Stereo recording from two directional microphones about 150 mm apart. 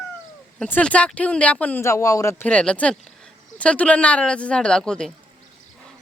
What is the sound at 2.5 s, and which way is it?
Speech, 10° left (ahead or behind).